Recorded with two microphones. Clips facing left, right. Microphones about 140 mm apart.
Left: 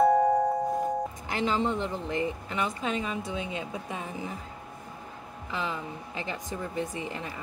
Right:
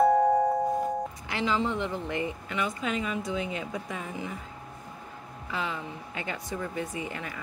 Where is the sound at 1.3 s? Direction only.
40° left (ahead or behind); by 4.1 s 25° left (ahead or behind).